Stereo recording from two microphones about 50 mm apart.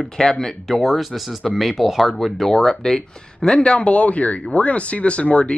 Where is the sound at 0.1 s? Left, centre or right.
Centre.